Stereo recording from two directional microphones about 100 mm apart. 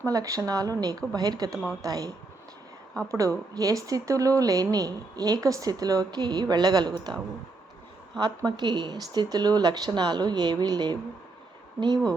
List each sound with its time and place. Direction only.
0.0 s a woman's voice: 35° right (ahead or behind)
8.4 s speech: 45° right (ahead or behind)